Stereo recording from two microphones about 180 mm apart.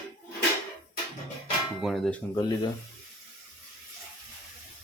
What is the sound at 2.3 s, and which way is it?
Speech, 20° left (ahead or behind).